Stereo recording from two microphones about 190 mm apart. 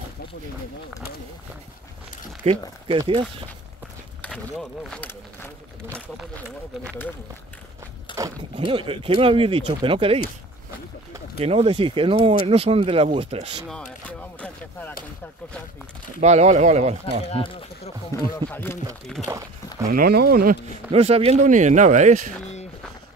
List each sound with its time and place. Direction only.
2.4 s speech: 35° right (ahead or behind)
4.2 s speech: centre (ahead or behind)
8.1 s a sound: 25° left (ahead or behind)
8.5 s speech: 30° right (ahead or behind)
11.3 s speech: 30° right (ahead or behind)
14.0 s a sound: 10° left (ahead or behind)
16.2 s speech: 35° right (ahead or behind)
17.3 s speech: 30° left (ahead or behind)
18.1 s speech: 15° left (ahead or behind)
19.9 s speech: 55° right (ahead or behind)
20.9 s speech: 30° right (ahead or behind)